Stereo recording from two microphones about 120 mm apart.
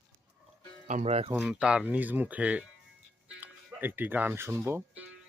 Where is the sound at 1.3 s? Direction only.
10° right (ahead or behind).